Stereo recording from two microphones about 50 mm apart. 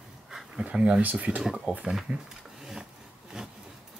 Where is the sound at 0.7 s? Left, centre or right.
Right.